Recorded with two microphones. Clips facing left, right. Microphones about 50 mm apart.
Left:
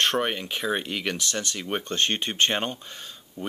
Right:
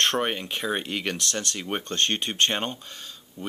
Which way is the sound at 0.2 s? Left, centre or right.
Centre.